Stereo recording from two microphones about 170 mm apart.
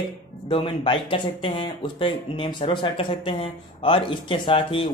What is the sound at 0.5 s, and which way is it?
Speech, 30° left (ahead or behind).